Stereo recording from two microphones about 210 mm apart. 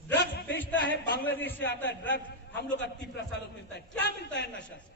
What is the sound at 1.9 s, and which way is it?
A man's voice, 55° left (ahead or behind).